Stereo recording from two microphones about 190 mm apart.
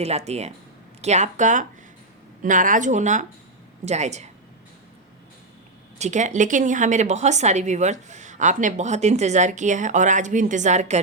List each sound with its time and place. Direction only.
0.0 s a woman's voice: 35° right (ahead or behind)
6.0 s a woman's voice: 40° right (ahead or behind)